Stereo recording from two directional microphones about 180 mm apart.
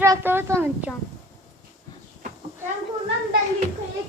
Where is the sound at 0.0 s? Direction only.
15° right (ahead or behind).